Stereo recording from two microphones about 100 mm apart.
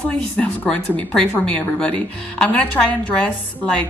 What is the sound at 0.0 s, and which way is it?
A woman's voice, 15° left (ahead or behind).